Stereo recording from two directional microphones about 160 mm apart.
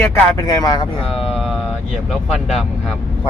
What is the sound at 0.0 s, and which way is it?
Speech, 15° left (ahead or behind).